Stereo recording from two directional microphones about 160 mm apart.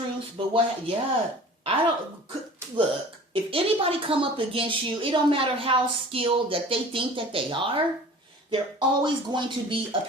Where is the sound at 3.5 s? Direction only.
35° right (ahead or behind).